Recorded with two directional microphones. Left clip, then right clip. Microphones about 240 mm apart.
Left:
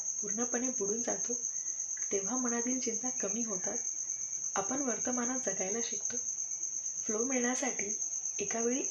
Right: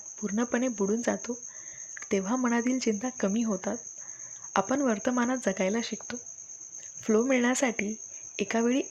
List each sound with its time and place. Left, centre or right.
0.3 s speech: right
4.5 s speech: right
7.1 s speech: right